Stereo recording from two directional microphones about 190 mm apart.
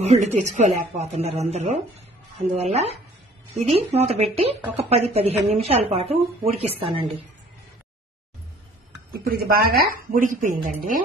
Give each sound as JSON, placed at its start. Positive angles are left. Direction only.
{"t": 0.0, "sound": "a woman's voice", "side_deg": -35}
{"t": 9.1, "sound": "a woman's voice", "side_deg": -55}